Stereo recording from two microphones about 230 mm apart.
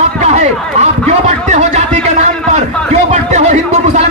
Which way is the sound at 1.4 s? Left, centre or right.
Right.